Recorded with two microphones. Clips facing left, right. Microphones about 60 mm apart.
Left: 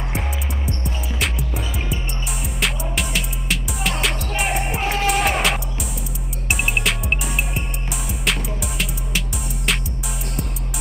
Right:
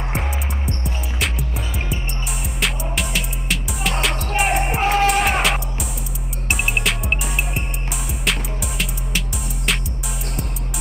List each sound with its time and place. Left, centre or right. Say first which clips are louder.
0.7 s music: even; centre
2.6 s music: even; centre
8.3 s music: even; centre